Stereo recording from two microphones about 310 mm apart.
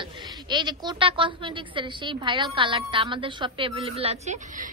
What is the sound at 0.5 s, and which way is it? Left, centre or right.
A woman's voice, centre.